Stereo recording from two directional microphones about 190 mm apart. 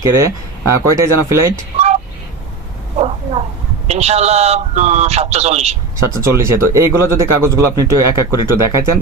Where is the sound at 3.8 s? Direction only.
35° right (ahead or behind).